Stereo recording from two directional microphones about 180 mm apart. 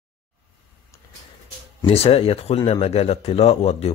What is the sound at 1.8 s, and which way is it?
Speech, 30° left (ahead or behind).